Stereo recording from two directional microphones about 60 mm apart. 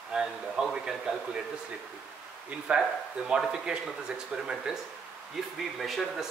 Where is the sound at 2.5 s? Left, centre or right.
Centre.